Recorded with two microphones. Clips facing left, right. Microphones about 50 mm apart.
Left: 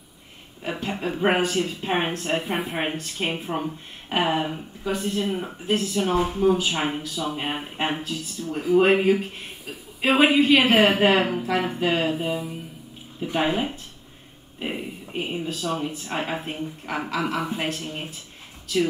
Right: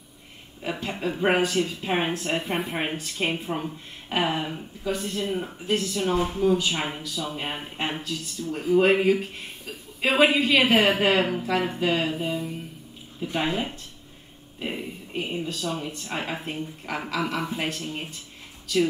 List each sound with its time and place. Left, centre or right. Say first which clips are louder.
0.6 s speech: left 1 dB; centre
13.2 s speech: left 3 dB; centre